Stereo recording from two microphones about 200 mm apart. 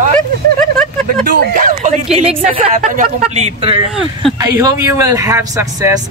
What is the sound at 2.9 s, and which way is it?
Speech, 40° right (ahead or behind).